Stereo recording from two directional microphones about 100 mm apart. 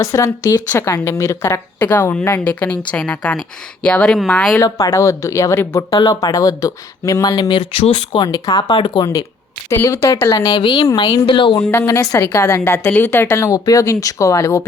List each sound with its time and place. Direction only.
0.0 s speech: 30° left (ahead or behind)
0.7 s a woman's voice: 25° left (ahead or behind); by 4.5 s 5° left (ahead or behind)
4.5 s a woman's voice: 30° left (ahead or behind)
5.9 s speech: 40° left (ahead or behind)
7.7 s speech: 85° left
8.2 s speech: 45° left (ahead or behind)
9.6 s speech: 30° left (ahead or behind)
10.6 s speech: 50° left (ahead or behind)
12.1 s speech: 30° left (ahead or behind)